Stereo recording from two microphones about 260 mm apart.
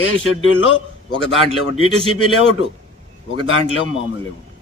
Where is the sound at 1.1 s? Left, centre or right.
Right.